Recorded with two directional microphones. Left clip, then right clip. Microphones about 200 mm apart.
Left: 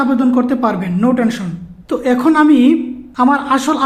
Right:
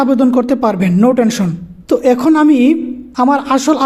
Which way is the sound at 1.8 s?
25° right (ahead or behind).